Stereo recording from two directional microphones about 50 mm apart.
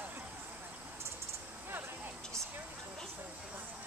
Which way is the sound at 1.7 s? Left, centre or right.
Right.